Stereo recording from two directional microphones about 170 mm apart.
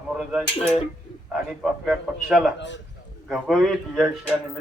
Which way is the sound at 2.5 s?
90° left.